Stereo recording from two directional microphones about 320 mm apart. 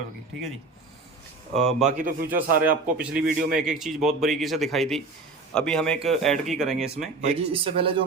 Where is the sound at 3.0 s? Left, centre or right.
Centre.